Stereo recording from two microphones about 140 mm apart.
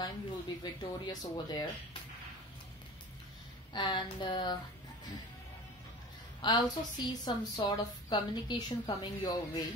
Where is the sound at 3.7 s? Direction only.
35° left (ahead or behind).